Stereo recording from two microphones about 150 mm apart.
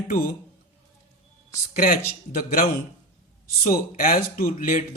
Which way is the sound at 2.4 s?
70° left (ahead or behind).